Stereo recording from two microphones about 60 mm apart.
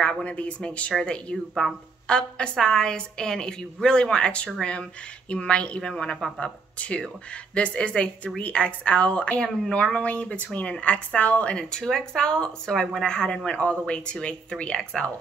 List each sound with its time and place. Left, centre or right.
0.0 s a woman's voice: centre
1.5 s speech: centre
2.0 s a woman's voice: centre